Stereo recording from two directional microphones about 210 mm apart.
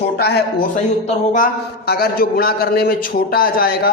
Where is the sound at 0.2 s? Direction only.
50° left (ahead or behind).